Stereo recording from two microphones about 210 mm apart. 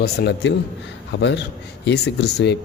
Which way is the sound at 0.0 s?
55° left (ahead or behind).